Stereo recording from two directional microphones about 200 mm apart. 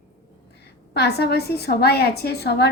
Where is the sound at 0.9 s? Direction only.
55° left (ahead or behind).